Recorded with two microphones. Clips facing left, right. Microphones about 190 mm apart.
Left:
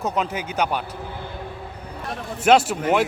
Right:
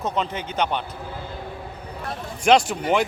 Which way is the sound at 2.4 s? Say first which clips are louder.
Left 1 dB; 5° left (ahead or behind).